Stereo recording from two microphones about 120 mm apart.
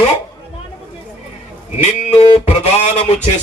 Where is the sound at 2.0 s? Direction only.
55° left (ahead or behind).